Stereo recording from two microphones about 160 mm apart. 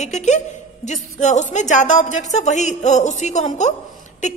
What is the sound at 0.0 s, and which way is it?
A woman's voice, 45° left (ahead or behind).